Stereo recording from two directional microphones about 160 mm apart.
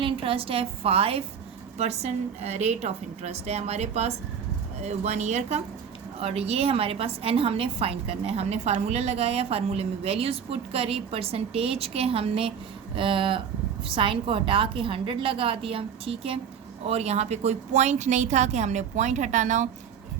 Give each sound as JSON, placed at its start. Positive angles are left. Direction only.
{"t": 0.0, "sound": "a woman's voice", "side_deg": -35}